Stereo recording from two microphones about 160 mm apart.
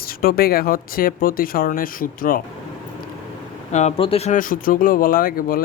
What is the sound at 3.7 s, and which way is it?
Speech, 45° left (ahead or behind).